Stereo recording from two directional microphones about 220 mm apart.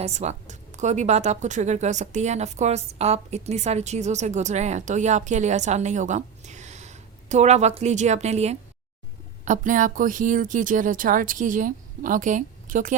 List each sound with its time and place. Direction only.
0.0 s speech: 30° right (ahead or behind)